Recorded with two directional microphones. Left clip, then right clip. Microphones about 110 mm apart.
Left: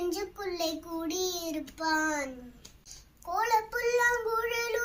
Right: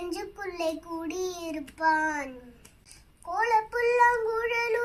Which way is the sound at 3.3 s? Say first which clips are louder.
Right 2 dB; 20° left (ahead or behind).